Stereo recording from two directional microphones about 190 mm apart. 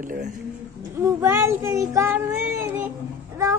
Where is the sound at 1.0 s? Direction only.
15° right (ahead or behind).